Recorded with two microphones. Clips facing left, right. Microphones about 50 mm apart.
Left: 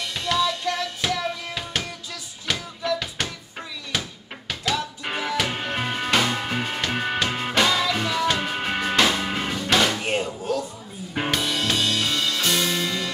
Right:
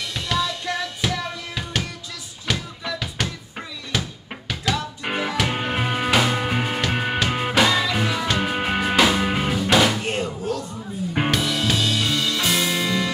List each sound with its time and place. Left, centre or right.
0.1 s music: centre
5.0 s music: centre
10.0 s music: centre